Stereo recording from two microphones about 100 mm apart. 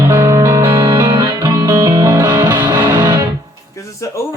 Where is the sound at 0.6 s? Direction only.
55° right (ahead or behind).